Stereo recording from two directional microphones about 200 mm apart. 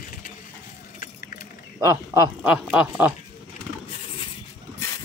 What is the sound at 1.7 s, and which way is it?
Speech, 15° right (ahead or behind).